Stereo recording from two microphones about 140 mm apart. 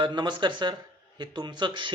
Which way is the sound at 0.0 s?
35° right (ahead or behind).